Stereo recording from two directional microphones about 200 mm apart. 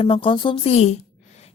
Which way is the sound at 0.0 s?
25° left (ahead or behind).